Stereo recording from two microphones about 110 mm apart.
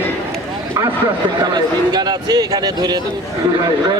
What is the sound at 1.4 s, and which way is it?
A man's voice, 40° right (ahead or behind).